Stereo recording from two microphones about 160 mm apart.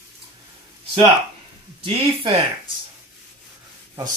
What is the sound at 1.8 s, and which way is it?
Speech, 35° right (ahead or behind).